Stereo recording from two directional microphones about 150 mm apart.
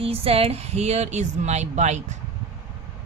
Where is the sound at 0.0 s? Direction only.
40° right (ahead or behind).